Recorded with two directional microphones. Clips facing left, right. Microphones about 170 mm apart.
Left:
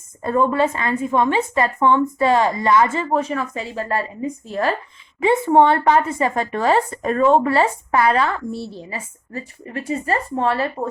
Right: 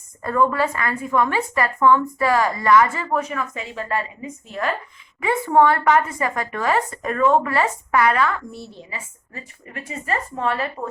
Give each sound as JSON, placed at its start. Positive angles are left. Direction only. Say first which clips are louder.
{"t": 0.2, "sound": "a woman's voice", "louder": "left 2 dB", "side_deg": 25}